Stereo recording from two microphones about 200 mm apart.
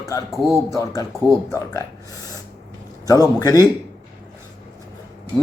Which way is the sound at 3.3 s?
15° left (ahead or behind).